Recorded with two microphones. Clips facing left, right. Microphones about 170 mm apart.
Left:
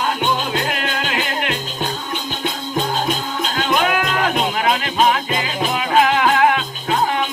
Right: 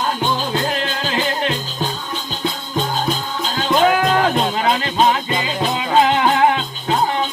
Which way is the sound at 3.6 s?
30° right (ahead or behind).